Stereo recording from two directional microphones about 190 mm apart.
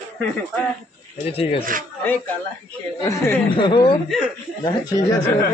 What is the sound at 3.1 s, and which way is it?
Speech, 15° left (ahead or behind).